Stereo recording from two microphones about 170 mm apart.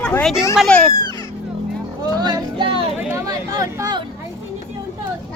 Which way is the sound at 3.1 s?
20° right (ahead or behind).